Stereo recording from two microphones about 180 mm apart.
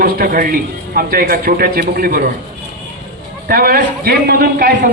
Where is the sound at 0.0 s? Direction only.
55° right (ahead or behind).